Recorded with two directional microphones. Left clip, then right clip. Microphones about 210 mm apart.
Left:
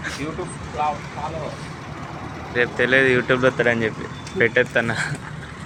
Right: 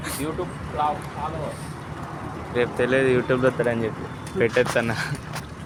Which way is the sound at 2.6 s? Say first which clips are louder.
Left 4 dB; centre (ahead or behind).